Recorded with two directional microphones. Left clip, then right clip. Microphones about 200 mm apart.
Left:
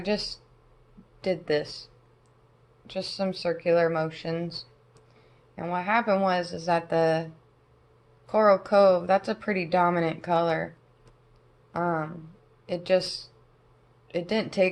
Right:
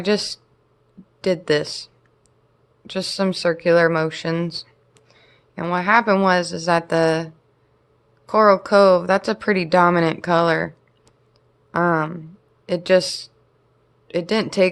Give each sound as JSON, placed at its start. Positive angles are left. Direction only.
{"t": 0.0, "sound": "speech", "side_deg": -50}
{"t": 8.3, "sound": "speech", "side_deg": -45}